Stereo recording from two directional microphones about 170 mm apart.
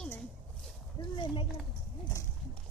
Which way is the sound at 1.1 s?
30° left (ahead or behind).